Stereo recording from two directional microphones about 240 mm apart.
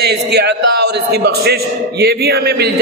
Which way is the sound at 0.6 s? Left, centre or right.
Right.